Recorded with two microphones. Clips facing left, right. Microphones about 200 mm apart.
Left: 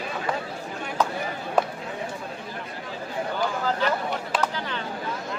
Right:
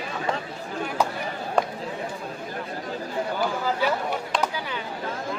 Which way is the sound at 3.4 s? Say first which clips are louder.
Even; 10° right (ahead or behind).